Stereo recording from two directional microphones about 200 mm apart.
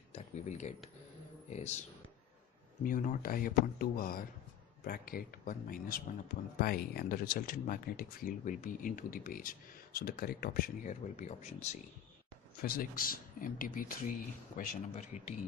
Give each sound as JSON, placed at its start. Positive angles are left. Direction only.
{"t": 0.1, "sound": "a sound", "side_deg": 35}
{"t": 1.5, "sound": "speech", "side_deg": 35}
{"t": 2.8, "sound": "speech", "side_deg": 40}
{"t": 12.6, "sound": "speech", "side_deg": 45}